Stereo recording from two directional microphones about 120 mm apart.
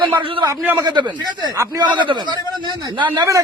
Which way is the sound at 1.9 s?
40° right (ahead or behind).